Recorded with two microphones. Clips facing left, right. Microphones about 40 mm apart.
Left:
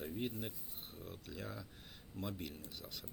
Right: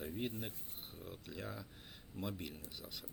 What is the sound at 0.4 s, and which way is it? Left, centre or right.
Speech, centre.